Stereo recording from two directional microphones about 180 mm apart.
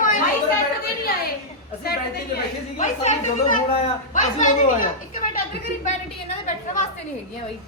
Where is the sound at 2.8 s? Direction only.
40° left (ahead or behind).